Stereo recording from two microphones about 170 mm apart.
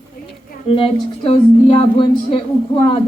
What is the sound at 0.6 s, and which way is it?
Speech, 30° left (ahead or behind).